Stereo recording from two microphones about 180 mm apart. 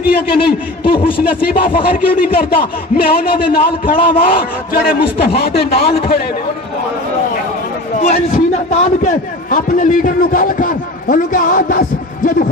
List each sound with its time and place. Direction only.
0.0 s speech: 55° left (ahead or behind)
7.9 s a man's voice: 40° left (ahead or behind)